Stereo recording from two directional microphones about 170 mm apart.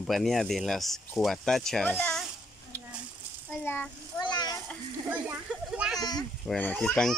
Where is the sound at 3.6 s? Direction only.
15° left (ahead or behind).